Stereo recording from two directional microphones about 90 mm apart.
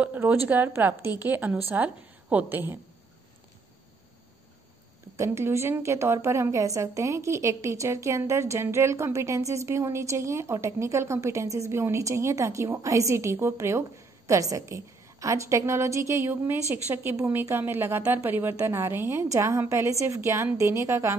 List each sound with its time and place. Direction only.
0.0 s a sound: 20° right (ahead or behind)
0.5 s a woman's voice: 20° right (ahead or behind)
5.1 s a woman's voice: 30° right (ahead or behind)